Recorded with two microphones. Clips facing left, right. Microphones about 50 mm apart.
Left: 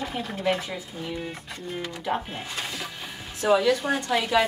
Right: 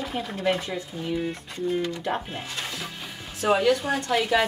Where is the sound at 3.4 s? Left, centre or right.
Right.